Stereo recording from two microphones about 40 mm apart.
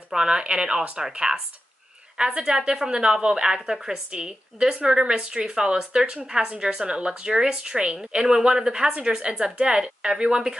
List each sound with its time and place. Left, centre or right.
0.1 s a woman's voice: centre
2.4 s a woman's voice: centre